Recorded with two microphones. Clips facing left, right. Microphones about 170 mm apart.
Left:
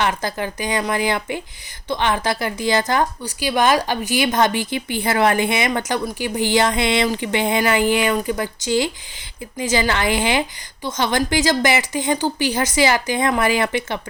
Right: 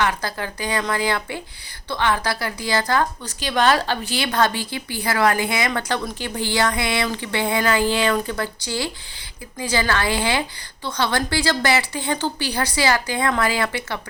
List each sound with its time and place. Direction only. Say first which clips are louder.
0.0 s a woman's voice: left 2 dB; 20° left (ahead or behind)